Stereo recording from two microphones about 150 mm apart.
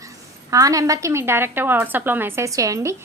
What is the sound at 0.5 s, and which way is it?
A woman's voice, 20° right (ahead or behind).